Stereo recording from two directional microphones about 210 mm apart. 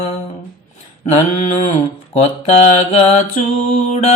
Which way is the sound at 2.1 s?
30° left (ahead or behind).